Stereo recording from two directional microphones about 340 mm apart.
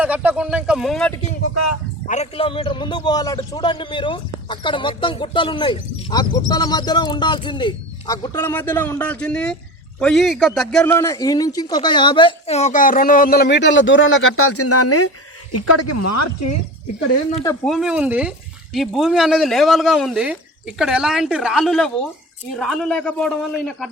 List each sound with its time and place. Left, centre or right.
0.0 s speech: centre
1.5 s speech: left
2.0 s a man's voice: centre; by 16.6 s left
17.3 s speech: centre